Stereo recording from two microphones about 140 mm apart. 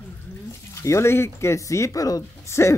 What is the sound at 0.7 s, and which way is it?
Speech, 20° left (ahead or behind).